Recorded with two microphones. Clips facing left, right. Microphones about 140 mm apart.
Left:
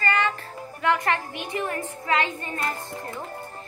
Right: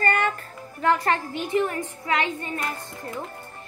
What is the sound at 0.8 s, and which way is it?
Speech, 35° right (ahead or behind).